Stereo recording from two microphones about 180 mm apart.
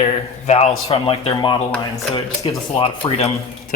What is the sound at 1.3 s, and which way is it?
Speech, 25° left (ahead or behind).